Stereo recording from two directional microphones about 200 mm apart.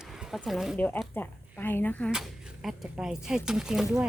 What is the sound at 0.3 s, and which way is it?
Speech, centre (ahead or behind).